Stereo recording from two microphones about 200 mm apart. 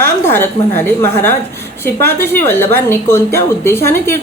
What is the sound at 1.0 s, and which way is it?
A woman's voice, 10° left (ahead or behind).